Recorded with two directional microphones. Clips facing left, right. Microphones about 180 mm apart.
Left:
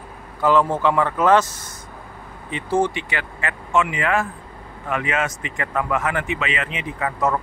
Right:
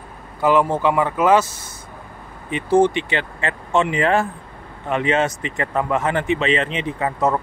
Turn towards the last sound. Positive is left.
turn(degrees=-30)  # may be behind; listen again after turning